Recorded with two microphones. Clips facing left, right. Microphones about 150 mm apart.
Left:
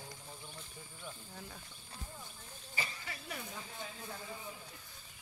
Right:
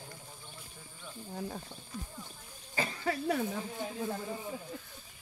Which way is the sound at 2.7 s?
55° right (ahead or behind).